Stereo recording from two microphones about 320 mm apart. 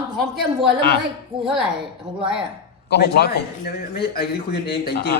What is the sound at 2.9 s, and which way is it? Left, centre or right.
A man's voice, left.